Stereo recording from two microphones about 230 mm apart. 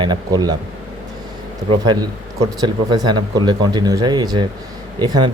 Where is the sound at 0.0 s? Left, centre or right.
Centre.